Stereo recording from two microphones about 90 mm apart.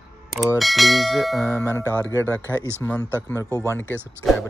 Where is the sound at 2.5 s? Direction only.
25° right (ahead or behind).